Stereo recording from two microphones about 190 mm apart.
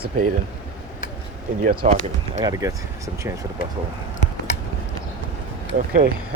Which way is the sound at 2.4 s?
20° right (ahead or behind).